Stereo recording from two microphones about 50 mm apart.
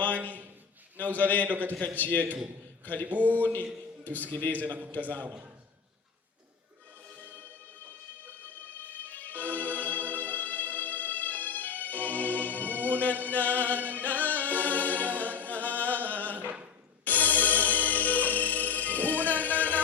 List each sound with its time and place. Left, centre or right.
0.9 s a man's voice: left
1.5 s speech: right
2.0 s a man's voice: left
3.1 s speech: right
4.0 s a man's voice: left
4.6 s a man's voice: right
8.6 s music: left
16.3 s a sound: right
17.0 s music: left